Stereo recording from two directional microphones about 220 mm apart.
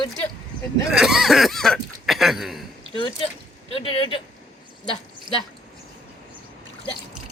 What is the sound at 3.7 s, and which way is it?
Speech, 25° left (ahead or behind).